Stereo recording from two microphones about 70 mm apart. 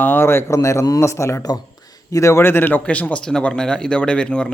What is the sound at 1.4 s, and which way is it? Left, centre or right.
Speech, left.